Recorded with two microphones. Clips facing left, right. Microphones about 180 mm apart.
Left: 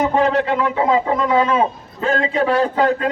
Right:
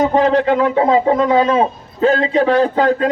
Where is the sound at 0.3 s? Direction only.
30° right (ahead or behind).